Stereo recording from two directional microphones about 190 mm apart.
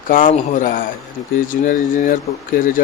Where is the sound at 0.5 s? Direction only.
45° left (ahead or behind).